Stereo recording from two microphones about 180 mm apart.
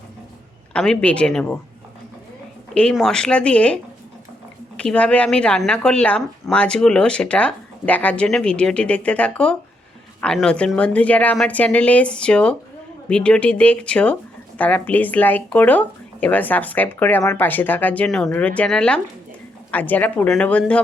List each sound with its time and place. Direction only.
0.7 s a woman's voice: 5° left (ahead or behind)
2.7 s a woman's voice: 5° left (ahead or behind)
4.8 s a woman's voice: 5° left (ahead or behind)